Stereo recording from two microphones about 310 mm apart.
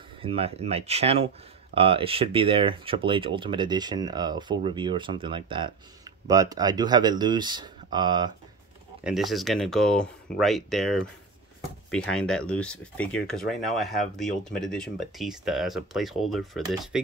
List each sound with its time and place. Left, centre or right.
0.2 s speech: centre
9.0 s speech: centre